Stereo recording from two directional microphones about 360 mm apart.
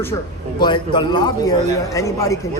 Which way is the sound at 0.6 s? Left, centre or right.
Centre.